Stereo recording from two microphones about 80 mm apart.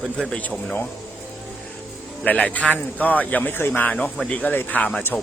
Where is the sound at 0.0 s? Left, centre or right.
Centre.